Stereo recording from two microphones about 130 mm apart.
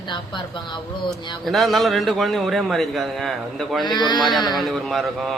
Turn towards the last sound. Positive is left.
turn(degrees=0)  # may be behind; listen again after turning